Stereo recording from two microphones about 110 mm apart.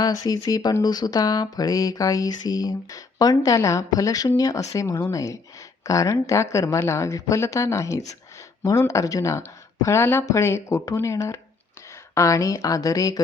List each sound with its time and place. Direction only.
0.0 s speech: 35° left (ahead or behind)